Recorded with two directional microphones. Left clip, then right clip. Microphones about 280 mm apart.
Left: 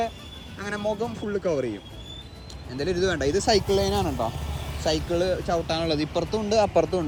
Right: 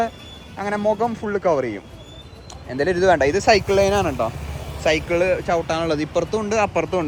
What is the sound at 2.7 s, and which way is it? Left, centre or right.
Speech, centre.